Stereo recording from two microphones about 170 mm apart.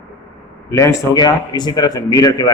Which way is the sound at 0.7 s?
15° left (ahead or behind).